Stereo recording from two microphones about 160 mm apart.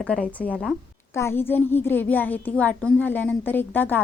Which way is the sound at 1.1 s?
15° left (ahead or behind).